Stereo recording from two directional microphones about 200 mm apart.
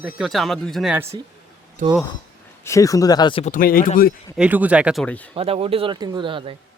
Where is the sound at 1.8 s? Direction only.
40° right (ahead or behind).